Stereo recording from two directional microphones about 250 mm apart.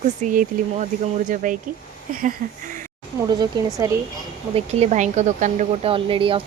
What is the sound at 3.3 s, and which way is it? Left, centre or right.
Speech, centre.